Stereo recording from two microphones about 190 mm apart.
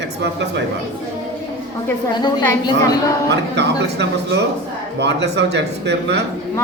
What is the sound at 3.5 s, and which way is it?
A man's voice, 65° right (ahead or behind).